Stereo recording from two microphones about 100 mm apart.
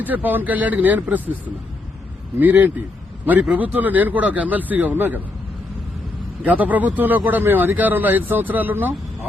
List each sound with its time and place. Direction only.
0.0 s speech: 15° right (ahead or behind)
2.4 s speech: 15° right (ahead or behind)
6.4 s speech: 15° right (ahead or behind)